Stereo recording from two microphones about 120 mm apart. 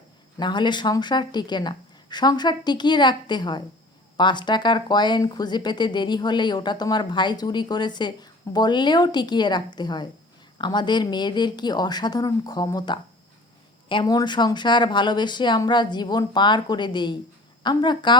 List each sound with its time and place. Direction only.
0.3 s speech: 40° left (ahead or behind)